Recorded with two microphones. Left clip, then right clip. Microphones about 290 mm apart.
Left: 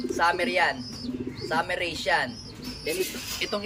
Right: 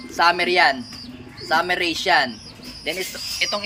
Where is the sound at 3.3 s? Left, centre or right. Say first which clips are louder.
Right 7 dB; centre.